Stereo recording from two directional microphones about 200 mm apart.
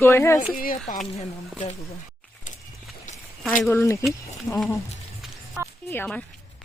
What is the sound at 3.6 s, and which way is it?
Speech, 10° left (ahead or behind).